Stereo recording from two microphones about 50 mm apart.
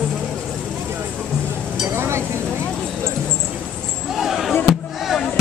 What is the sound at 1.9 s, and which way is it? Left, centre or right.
Stir, right.